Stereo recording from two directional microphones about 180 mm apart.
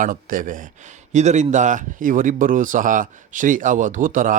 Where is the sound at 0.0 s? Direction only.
50° right (ahead or behind).